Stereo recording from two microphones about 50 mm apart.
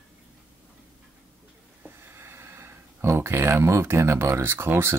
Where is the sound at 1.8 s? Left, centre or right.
Right.